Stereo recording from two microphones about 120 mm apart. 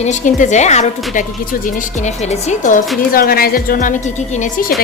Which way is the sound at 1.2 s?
90° left.